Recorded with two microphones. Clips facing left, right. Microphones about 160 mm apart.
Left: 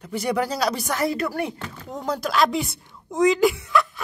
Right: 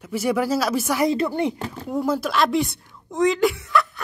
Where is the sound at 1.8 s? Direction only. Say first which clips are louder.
Right 4 dB; 5° right (ahead or behind).